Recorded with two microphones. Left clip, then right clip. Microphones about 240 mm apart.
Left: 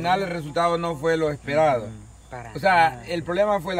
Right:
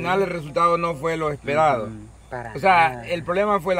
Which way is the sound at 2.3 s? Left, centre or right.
Right.